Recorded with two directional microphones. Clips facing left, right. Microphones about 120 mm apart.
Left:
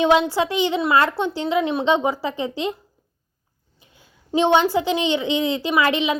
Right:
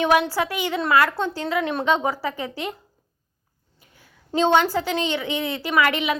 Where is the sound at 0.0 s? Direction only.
25° left (ahead or behind).